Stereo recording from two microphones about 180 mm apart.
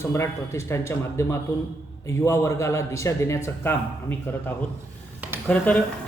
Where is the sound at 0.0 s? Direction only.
15° left (ahead or behind).